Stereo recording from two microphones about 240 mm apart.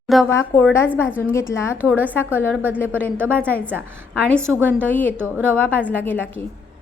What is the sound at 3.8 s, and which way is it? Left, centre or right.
Speech, centre.